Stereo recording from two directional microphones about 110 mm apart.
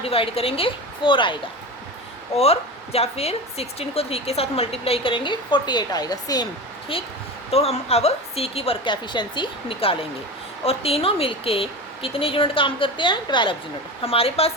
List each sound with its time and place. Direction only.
0.0 s a woman's voice: 60° left (ahead or behind)
2.3 s a woman's voice: 65° left (ahead or behind); by 6.5 s 35° left (ahead or behind)
6.9 s a woman's voice: 55° left (ahead or behind)
7.5 s a woman's voice: 65° left (ahead or behind); by 13.6 s 45° left (ahead or behind)
14.0 s a woman's voice: 60° left (ahead or behind)